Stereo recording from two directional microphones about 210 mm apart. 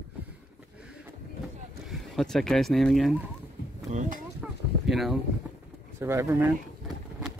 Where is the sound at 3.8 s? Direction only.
35° right (ahead or behind).